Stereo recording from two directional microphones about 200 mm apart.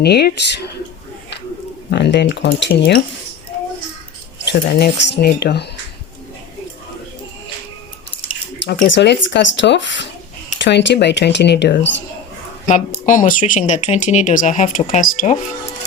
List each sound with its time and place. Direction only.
0.0 s speech: 55° left (ahead or behind)
1.9 s speech: 60° left (ahead or behind)
4.4 s speech: 60° left (ahead or behind)
8.6 s speech: 45° left (ahead or behind)
8.9 s speech: 65° left (ahead or behind)
13.1 s speech: 40° left (ahead or behind)